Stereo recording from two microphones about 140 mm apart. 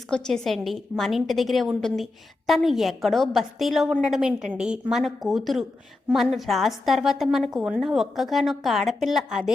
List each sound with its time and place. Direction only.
0.1 s a woman's voice: 5° left (ahead or behind)